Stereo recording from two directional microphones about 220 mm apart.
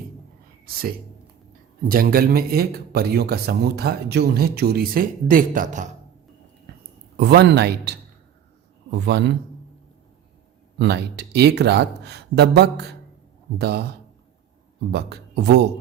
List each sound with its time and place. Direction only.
0.6 s a man's voice: 40° right (ahead or behind)
7.2 s a man's voice: 50° right (ahead or behind)
10.8 s a man's voice: 50° right (ahead or behind)
14.9 s a man's voice: 50° right (ahead or behind)